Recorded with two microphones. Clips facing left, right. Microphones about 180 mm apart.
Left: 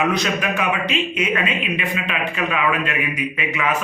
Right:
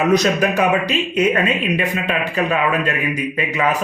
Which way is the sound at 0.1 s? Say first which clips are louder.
Right 6 dB; 40° right (ahead or behind).